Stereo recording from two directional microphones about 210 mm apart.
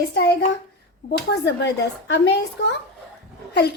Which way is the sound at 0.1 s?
50° left (ahead or behind).